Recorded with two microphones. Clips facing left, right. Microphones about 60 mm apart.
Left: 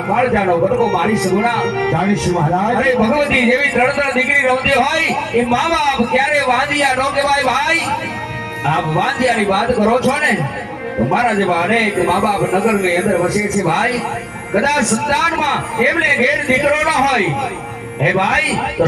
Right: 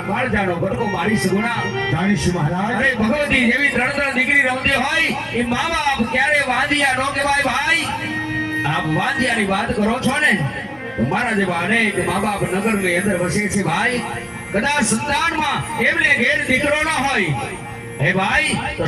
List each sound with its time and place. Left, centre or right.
0.5 s a man's voice: left
1.5 s a man's voice: left
13.1 s a man's voice: centre
13.6 s a man's voice: left